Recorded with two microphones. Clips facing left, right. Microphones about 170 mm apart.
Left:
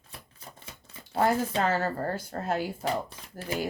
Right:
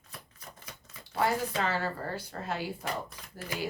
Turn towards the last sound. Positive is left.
turn(degrees=30)  # may be behind; listen again after turning